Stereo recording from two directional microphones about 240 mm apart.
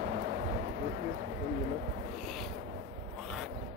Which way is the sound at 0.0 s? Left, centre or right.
Right.